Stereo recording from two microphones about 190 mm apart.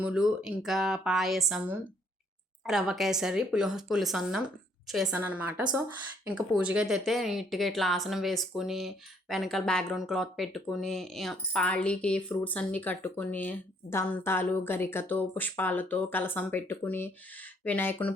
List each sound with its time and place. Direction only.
0.0 s a woman's voice: 5° right (ahead or behind)